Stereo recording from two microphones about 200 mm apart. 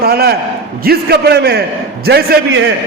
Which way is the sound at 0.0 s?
50° right (ahead or behind).